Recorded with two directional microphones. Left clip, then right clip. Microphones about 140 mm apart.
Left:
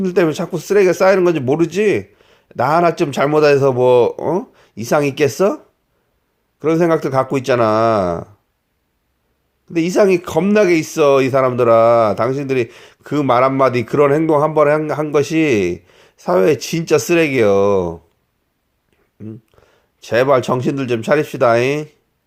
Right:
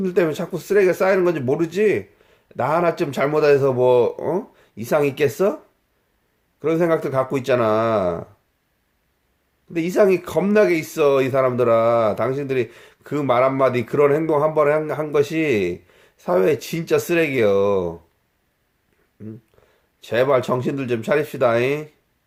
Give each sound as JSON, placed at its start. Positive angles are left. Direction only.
{"t": 0.0, "sound": "speech", "side_deg": 30}
{"t": 6.6, "sound": "speech", "side_deg": 30}
{"t": 9.7, "sound": "speech", "side_deg": 30}
{"t": 15.9, "sound": "a sound", "side_deg": 30}
{"t": 17.1, "sound": "speech", "side_deg": 30}
{"t": 19.2, "sound": "a sound", "side_deg": 30}
{"t": 20.5, "sound": "speech", "side_deg": 30}